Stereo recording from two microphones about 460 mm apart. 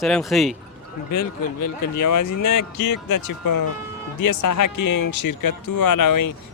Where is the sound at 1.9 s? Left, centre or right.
Left.